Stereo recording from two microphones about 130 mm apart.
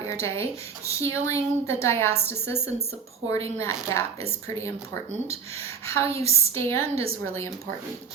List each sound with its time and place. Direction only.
0.0 s a woman's voice: 20° left (ahead or behind)
5.5 s a woman's voice: 20° left (ahead or behind)
6.1 s a woman's voice: 50° right (ahead or behind)